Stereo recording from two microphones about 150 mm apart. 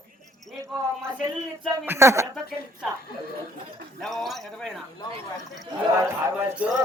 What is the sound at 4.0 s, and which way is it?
Speech, centre (ahead or behind).